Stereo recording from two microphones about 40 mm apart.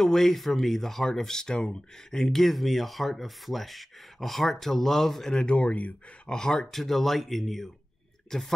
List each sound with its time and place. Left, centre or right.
0.0 s speech: centre
2.1 s speech: centre
5.6 s speech: left
6.2 s speech: centre